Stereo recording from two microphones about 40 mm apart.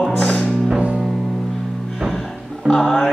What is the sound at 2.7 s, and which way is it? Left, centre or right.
Speech, centre.